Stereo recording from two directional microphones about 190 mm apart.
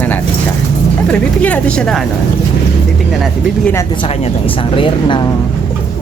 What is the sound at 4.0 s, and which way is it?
Speech, 25° left (ahead or behind).